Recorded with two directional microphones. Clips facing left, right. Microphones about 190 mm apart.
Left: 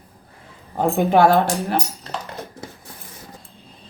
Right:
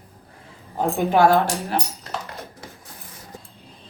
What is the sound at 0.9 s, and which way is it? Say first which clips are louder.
Speech: left 2 dB; 55° left (ahead or behind).